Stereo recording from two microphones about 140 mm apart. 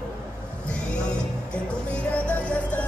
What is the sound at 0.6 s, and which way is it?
Music, 5° left (ahead or behind).